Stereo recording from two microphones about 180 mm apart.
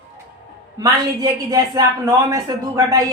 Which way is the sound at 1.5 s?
20° right (ahead or behind).